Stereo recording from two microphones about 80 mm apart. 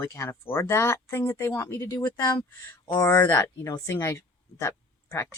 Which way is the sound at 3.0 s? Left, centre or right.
Left.